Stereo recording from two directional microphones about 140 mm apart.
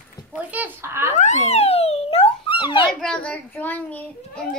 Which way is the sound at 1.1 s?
60° left (ahead or behind).